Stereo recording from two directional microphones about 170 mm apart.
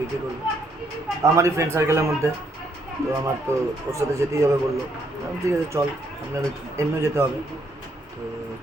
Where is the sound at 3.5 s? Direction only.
15° right (ahead or behind).